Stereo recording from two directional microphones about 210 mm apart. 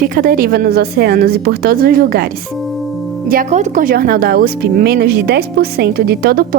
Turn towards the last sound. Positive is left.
turn(degrees=-45)  # may be behind; listen again after turning